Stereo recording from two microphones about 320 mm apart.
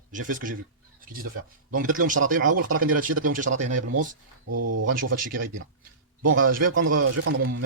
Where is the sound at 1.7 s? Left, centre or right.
Right.